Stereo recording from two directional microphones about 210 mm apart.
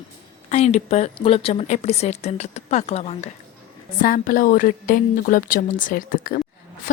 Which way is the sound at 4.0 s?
40° left (ahead or behind).